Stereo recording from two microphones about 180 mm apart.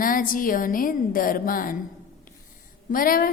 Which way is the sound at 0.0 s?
50° left (ahead or behind).